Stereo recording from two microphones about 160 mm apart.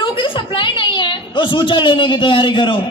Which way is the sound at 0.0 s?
30° left (ahead or behind).